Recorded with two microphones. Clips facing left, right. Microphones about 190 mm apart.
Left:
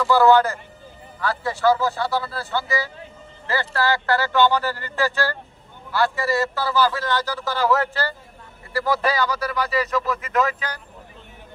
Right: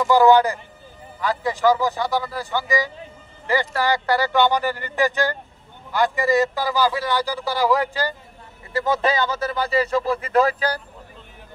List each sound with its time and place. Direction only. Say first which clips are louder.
0.0 s speech: right 1 dB; 15° right (ahead or behind); by 10.8 s 35° right (ahead or behind)